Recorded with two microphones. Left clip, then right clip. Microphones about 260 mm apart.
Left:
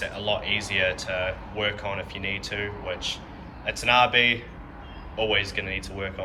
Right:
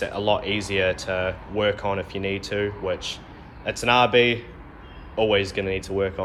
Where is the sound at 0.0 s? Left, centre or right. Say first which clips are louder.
Right 4 dB; centre.